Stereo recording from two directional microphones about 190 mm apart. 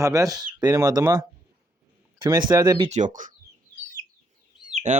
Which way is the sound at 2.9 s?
40° right (ahead or behind).